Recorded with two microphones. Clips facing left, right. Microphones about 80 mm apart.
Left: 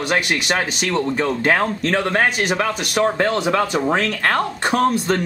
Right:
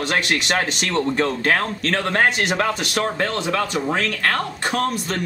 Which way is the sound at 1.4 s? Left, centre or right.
Centre.